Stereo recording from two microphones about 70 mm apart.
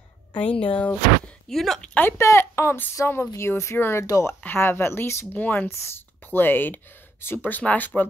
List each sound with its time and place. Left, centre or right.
0.4 s speech: left
1.5 s a woman's voice: centre
2.0 s speech: left
5.3 s speech: left